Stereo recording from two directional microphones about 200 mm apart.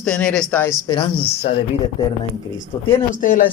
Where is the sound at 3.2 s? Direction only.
40° left (ahead or behind).